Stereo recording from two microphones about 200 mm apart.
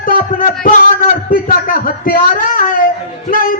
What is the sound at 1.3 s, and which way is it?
A man's voice, 45° left (ahead or behind).